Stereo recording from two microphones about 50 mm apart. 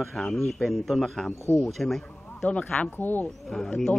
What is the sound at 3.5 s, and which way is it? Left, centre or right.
Speech, centre.